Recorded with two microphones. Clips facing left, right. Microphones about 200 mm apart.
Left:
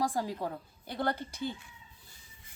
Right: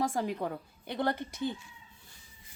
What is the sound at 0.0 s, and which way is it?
A woman's voice, 20° right (ahead or behind).